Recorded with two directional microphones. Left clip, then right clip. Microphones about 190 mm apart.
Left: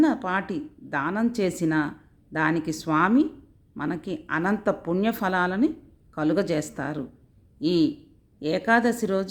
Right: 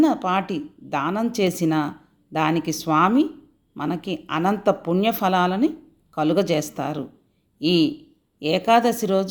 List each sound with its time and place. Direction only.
0.0 s a woman's voice: 10° left (ahead or behind)